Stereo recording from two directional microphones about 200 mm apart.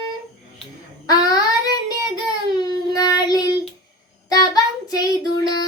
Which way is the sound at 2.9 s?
20° left (ahead or behind).